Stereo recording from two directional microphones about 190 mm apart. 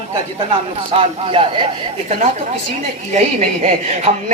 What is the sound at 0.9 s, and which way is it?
Speech, 30° right (ahead or behind).